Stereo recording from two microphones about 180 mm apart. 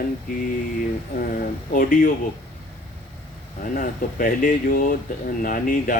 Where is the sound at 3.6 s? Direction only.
50° left (ahead or behind).